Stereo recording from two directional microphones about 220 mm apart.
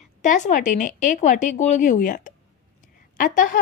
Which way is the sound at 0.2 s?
35° left (ahead or behind).